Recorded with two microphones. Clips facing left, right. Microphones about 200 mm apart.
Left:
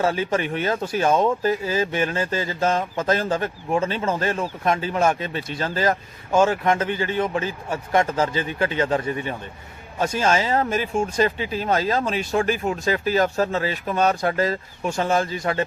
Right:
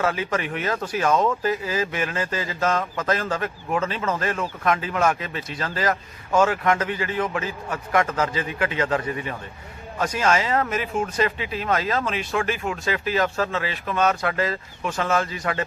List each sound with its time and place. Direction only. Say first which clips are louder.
0.0 s speech: left 3 dB; 30° left (ahead or behind)